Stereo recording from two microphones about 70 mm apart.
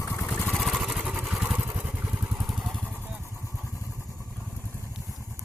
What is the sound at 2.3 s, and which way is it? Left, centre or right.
Vehicle, centre.